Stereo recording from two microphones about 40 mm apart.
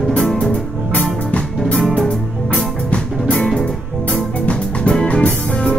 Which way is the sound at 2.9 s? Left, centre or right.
Left.